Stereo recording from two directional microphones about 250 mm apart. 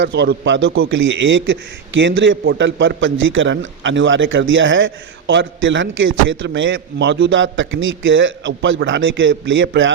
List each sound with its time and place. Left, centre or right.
0.0 s a man's voice: right